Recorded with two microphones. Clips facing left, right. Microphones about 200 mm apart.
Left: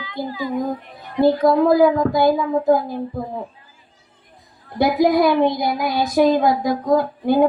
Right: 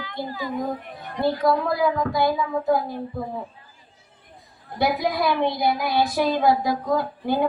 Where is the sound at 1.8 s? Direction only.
50° left (ahead or behind).